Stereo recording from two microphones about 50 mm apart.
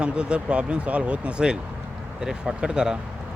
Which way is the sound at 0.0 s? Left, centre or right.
Right.